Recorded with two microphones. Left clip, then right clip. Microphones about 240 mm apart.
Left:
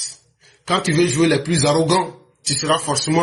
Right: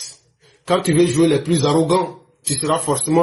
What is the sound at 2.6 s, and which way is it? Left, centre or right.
Speech, left.